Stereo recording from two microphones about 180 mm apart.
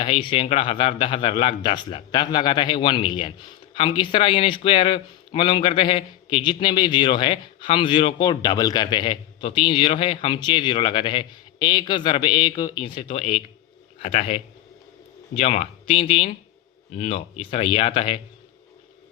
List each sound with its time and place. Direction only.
0.0 s a man's voice: 30° left (ahead or behind)